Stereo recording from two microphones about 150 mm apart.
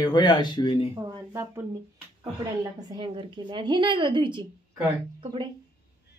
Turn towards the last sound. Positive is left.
turn(degrees=-35)  # may be behind; listen again after turning